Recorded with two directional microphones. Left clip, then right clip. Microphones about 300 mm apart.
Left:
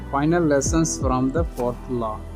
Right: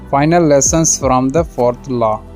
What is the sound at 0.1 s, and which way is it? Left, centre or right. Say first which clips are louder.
Speech: right 9 dB; right.